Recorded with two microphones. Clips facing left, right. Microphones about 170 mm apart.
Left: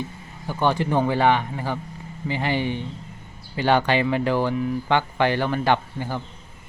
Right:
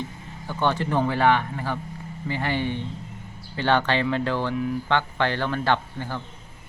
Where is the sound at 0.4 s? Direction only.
15° left (ahead or behind).